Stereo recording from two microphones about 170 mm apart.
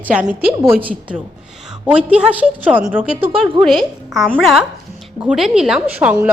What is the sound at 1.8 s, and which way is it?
A woman's voice, 5° right (ahead or behind).